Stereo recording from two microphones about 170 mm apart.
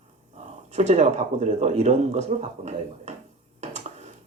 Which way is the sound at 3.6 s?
40° right (ahead or behind).